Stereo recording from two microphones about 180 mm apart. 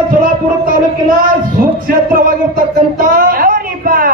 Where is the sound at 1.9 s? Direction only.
55° right (ahead or behind).